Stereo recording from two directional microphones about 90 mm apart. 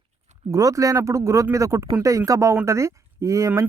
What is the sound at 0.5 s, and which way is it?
Speech, 40° right (ahead or behind).